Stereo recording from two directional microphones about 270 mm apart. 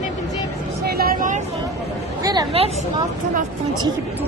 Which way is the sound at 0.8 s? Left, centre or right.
Right.